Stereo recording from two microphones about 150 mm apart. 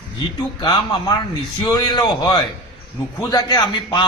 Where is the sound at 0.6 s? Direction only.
30° left (ahead or behind).